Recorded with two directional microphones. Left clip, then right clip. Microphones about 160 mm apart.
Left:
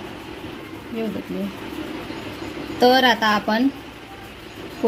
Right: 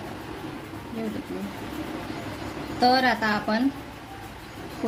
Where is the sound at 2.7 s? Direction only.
50° left (ahead or behind).